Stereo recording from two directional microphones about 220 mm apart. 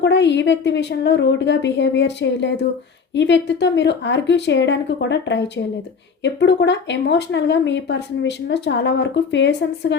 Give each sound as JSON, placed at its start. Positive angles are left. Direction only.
{"t": 0.0, "sound": "speech", "side_deg": 50}